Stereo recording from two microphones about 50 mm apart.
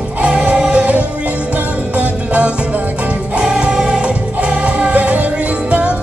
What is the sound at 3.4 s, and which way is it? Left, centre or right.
Music, centre.